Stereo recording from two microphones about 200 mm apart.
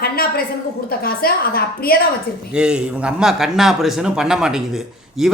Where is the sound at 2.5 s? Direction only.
5° right (ahead or behind).